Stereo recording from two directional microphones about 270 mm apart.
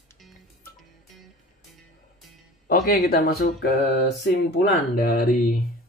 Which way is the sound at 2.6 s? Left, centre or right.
Left.